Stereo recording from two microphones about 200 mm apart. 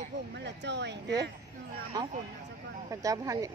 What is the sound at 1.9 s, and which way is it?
A woman's voice, 20° right (ahead or behind).